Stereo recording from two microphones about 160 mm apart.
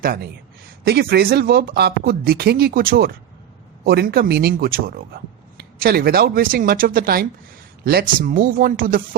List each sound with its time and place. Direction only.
0.0 s speech: 70° right (ahead or behind)